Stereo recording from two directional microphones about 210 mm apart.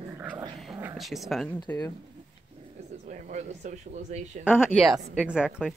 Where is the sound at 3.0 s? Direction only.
35° right (ahead or behind).